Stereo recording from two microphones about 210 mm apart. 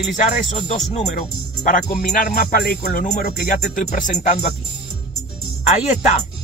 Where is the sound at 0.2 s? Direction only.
35° left (ahead or behind).